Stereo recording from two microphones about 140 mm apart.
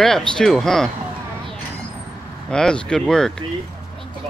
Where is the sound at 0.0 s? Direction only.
5° left (ahead or behind).